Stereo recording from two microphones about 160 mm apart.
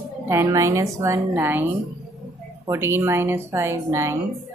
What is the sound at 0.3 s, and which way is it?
A woman's voice, 20° right (ahead or behind).